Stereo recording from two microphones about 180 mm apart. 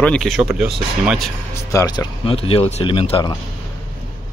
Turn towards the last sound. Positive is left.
turn(degrees=30)  # may be behind; listen again after turning